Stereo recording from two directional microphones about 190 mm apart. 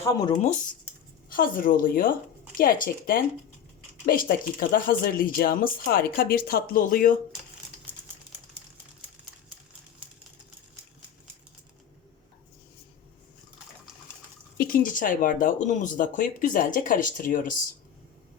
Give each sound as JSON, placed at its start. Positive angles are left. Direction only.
{"t": 1.3, "sound": "speech", "side_deg": 45}
{"t": 14.6, "sound": "speech", "side_deg": 45}